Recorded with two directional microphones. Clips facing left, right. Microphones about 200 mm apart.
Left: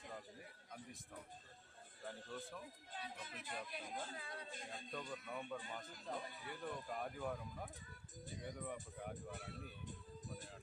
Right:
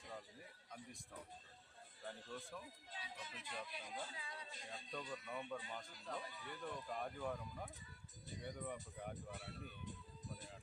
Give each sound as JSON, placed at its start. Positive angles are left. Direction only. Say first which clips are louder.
{"t": 2.0, "sound": "speech", "louder": "left 1 dB", "side_deg": 0}
{"t": 2.9, "sound": "speech", "louder": "left 3 dB", "side_deg": 55}
{"t": 4.7, "sound": "speech", "louder": "even", "side_deg": 0}